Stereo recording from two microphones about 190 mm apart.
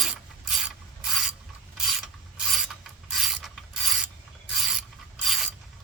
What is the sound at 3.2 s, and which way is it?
Pulleys, centre (ahead or behind).